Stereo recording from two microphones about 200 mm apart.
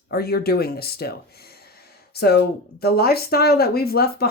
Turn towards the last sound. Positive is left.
turn(degrees=50)  # may be behind; listen again after turning